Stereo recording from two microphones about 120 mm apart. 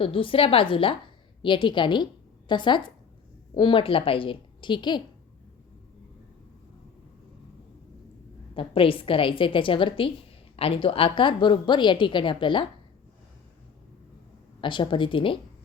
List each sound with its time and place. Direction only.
0.0 s a woman's voice: 50° left (ahead or behind)
8.5 s a woman's voice: 50° left (ahead or behind)
14.6 s a woman's voice: 40° left (ahead or behind)